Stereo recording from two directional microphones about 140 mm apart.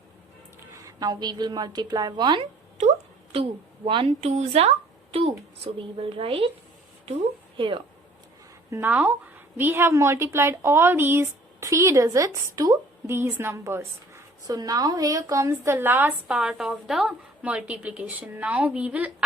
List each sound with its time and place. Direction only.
0.9 s a woman's voice: 25° right (ahead or behind)
4.3 s a woman's voice: 50° right (ahead or behind)
7.5 s speech: 35° right (ahead or behind)
8.7 s a woman's voice: 15° right (ahead or behind)